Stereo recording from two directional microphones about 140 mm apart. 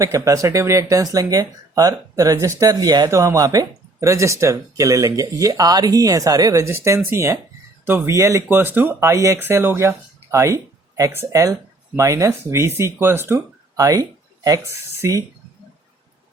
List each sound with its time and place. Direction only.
0.0 s speech: 25° right (ahead or behind)